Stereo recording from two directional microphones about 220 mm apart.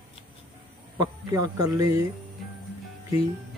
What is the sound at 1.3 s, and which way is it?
Speech, 15° right (ahead or behind).